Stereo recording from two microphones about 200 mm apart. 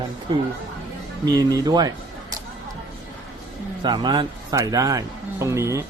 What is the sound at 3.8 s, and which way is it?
Speech, 20° right (ahead or behind).